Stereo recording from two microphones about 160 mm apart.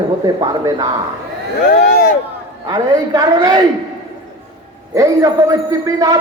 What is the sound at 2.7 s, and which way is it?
Speech, 20° right (ahead or behind).